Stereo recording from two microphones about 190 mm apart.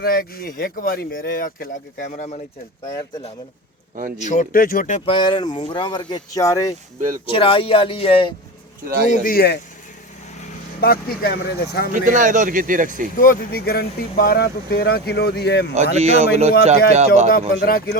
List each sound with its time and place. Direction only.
0.0 s speech: 50° left (ahead or behind)
4.2 s speech: 40° left (ahead or behind); by 6.7 s 15° left (ahead or behind)
7.3 s speech: 30° left (ahead or behind)
8.8 s speech: 50° right (ahead or behind)
9.1 s speech: 50° left (ahead or behind)
10.8 s speech: 55° left (ahead or behind)
11.9 s speech: 45° right (ahead or behind)
13.1 s speech: 50° left (ahead or behind)
15.7 s a man's voice: 35° right (ahead or behind)
17.2 s speech: 50° left (ahead or behind)